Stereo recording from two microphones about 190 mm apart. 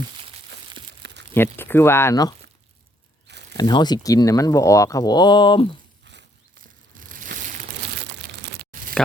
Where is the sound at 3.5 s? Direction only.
20° left (ahead or behind).